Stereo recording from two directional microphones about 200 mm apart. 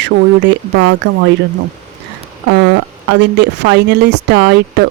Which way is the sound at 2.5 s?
65° right (ahead or behind).